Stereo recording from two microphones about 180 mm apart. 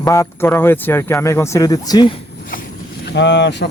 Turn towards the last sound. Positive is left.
turn(degrees=75)  # may be behind; listen again after turning